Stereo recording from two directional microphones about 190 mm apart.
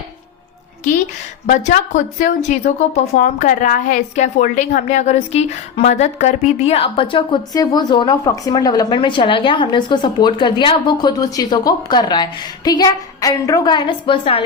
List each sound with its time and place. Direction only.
1.5 s a woman's voice: 40° left (ahead or behind)